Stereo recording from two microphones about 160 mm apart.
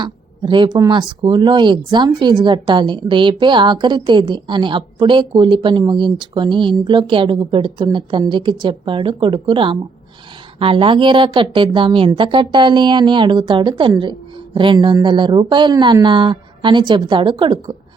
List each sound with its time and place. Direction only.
0.0 s a woman's voice: 30° right (ahead or behind)